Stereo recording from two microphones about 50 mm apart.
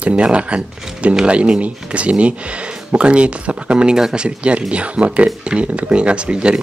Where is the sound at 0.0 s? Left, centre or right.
Right.